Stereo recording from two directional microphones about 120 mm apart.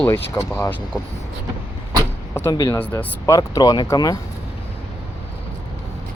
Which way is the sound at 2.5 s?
35° left (ahead or behind).